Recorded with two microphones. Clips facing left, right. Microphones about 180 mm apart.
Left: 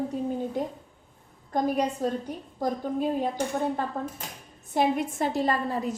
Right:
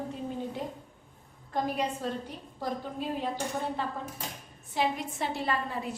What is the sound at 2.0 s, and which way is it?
A woman's voice, 45° left (ahead or behind).